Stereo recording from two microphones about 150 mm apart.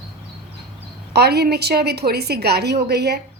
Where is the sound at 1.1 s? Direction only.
90° right.